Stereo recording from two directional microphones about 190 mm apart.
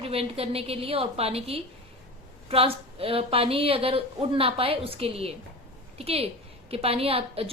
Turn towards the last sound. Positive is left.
turn(degrees=-30)  # may be behind; listen again after turning